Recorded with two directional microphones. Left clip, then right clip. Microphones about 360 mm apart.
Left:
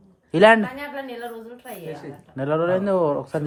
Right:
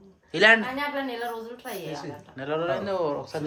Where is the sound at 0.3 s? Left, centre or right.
Centre.